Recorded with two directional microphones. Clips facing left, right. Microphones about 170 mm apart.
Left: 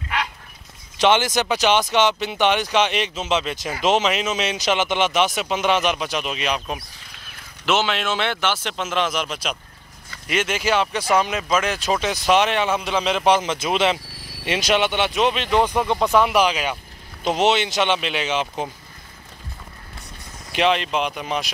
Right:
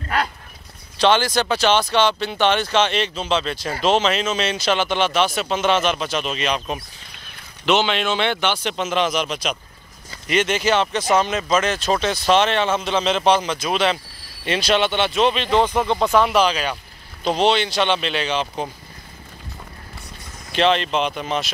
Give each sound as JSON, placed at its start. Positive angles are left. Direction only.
{"t": 0.9, "sound": "a man's voice", "side_deg": 20}
{"t": 13.4, "sound": "speech", "side_deg": 20}
{"t": 20.5, "sound": "speech", "side_deg": 10}